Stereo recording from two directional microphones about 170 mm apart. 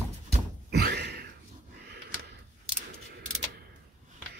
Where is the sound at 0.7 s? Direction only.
70° right (ahead or behind).